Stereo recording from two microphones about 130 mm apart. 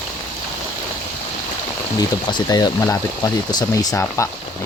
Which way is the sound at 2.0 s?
30° left (ahead or behind).